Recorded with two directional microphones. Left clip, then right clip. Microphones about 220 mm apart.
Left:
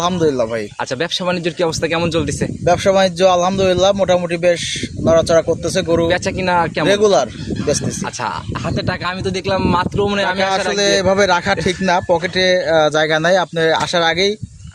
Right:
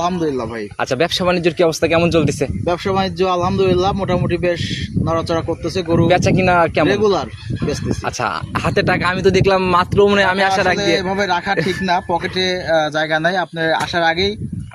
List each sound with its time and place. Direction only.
0.0 s a man's voice: 55° left (ahead or behind)
0.8 s speech: 15° right (ahead or behind)
2.6 s a man's voice: 50° left (ahead or behind)
6.1 s speech: 15° right (ahead or behind)
6.8 s a man's voice: 55° left (ahead or behind)
8.6 s speech: 35° right (ahead or behind)
10.8 s a man's voice: 55° left (ahead or behind)